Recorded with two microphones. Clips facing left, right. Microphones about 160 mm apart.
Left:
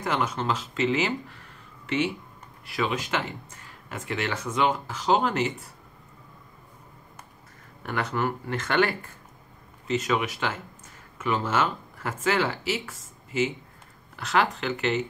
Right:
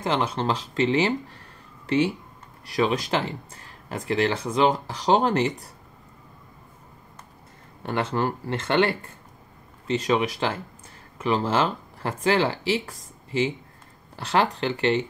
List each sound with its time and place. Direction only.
0.0 s speech: 30° right (ahead or behind)
7.8 s speech: 30° right (ahead or behind)